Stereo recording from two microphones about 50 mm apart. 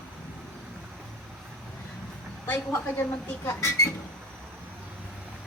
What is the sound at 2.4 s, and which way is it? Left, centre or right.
Speech, left.